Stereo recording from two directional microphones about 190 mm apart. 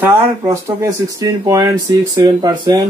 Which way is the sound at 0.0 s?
15° right (ahead or behind).